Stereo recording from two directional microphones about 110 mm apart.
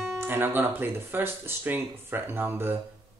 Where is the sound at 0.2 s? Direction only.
20° right (ahead or behind).